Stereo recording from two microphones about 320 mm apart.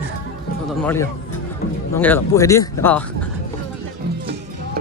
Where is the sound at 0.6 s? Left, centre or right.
Centre.